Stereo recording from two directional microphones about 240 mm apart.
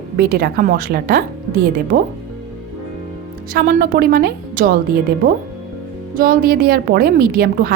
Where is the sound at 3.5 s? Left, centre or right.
Right.